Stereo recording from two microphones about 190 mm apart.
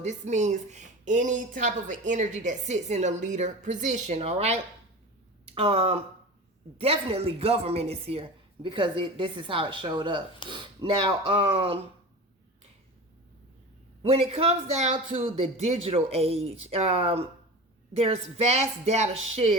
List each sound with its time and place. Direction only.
0.0 s speech: 40° right (ahead or behind)
14.0 s speech: 30° right (ahead or behind)